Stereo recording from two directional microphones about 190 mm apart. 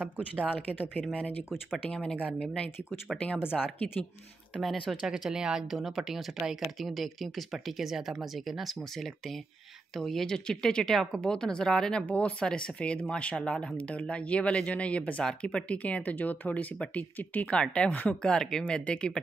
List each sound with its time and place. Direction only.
0.4 s speech: 10° left (ahead or behind)
4.6 s speech: centre (ahead or behind)